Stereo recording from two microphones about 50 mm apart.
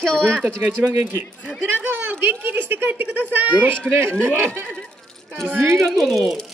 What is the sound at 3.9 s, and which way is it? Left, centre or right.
Speech, right.